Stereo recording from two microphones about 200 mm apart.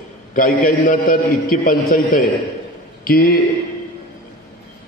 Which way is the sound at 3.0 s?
50° left (ahead or behind).